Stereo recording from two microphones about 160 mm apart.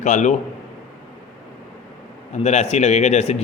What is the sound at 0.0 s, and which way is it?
Speech, 50° left (ahead or behind).